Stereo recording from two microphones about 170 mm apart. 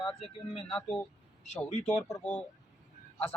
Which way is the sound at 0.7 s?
5° left (ahead or behind).